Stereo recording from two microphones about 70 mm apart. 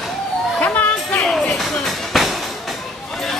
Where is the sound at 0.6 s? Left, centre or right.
Left.